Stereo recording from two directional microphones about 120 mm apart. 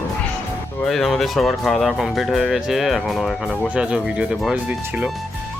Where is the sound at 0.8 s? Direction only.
Centre (ahead or behind).